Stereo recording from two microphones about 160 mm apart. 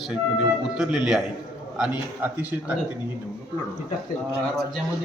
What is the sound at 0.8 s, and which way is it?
A man's voice, 5° right (ahead or behind).